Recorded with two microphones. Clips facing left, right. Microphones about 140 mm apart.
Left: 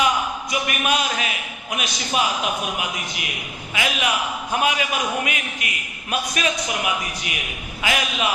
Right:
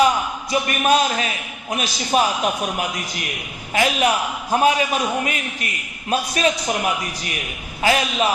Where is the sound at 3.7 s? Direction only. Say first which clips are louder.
Right 5 dB; 45° right (ahead or behind).